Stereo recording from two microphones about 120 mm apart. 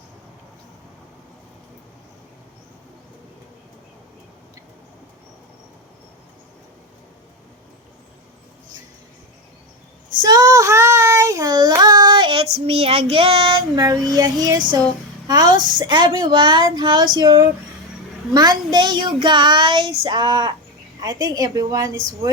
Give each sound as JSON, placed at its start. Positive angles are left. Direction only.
{"t": 10.2, "sound": "child singing", "side_deg": -35}
{"t": 13.7, "sound": "child singing", "side_deg": -30}